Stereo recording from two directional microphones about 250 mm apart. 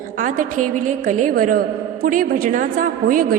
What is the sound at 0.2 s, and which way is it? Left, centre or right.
A woman's voice, right.